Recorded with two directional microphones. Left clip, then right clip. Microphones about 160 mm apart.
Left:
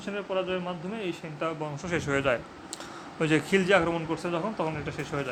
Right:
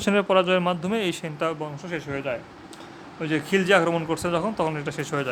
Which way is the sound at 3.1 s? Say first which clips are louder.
Left 1 dB; 20° left (ahead or behind).